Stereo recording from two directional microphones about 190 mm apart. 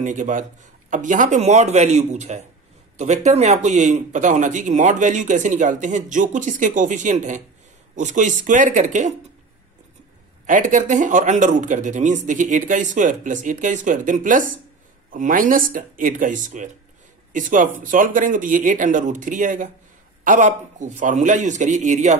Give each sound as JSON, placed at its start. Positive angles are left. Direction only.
{"t": 0.0, "sound": "speech", "side_deg": -40}
{"t": 10.4, "sound": "speech", "side_deg": -40}